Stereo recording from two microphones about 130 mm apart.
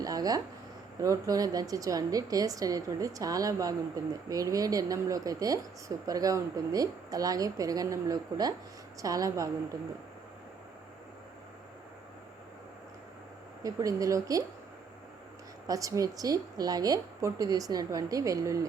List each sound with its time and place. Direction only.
0.0 s a woman's voice: 30° right (ahead or behind)
13.6 s a woman's voice: 25° right (ahead or behind)
15.6 s a woman's voice: 25° right (ahead or behind)